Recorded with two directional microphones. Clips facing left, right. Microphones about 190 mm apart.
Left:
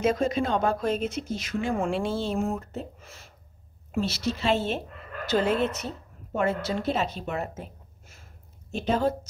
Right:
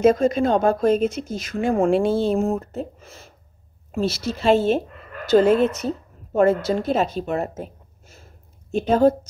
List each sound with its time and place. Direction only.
0.0 s a woman's voice: 45° right (ahead or behind)
4.0 s a woman's voice: 45° right (ahead or behind)